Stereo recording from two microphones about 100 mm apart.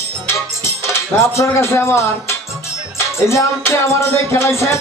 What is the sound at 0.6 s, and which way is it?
Music, 30° left (ahead or behind).